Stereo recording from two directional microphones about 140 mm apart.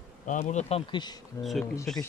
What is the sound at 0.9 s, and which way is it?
Speech, 30° left (ahead or behind).